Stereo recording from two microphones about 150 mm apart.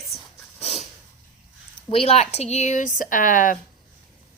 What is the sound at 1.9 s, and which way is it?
A woman's voice, 40° left (ahead or behind).